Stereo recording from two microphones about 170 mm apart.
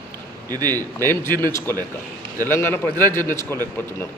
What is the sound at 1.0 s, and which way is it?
A man's voice, 15° left (ahead or behind).